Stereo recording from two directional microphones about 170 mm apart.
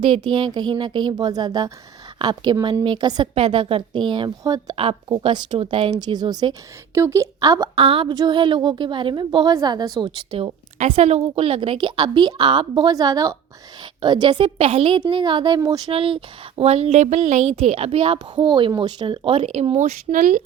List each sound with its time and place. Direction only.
0.0 s a woman's voice: 30° right (ahead or behind)
7.8 s a woman's voice: 35° right (ahead or behind)